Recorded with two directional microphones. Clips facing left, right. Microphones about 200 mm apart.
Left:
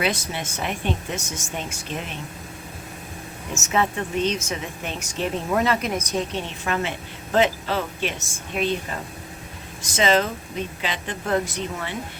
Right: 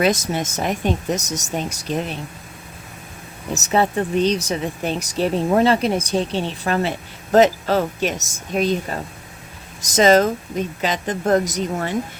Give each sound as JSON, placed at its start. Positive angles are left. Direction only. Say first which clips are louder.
{"t": 0.0, "sound": "speech", "louder": "right 7 dB", "side_deg": -45}
{"t": 3.5, "sound": "a woman's voice", "louder": "right 5 dB", "side_deg": -35}